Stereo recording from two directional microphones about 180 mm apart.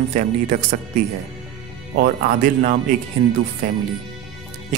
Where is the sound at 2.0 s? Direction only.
55° right (ahead or behind).